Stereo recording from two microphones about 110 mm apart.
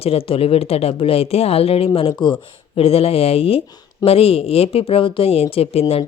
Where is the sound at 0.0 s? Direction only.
60° left (ahead or behind).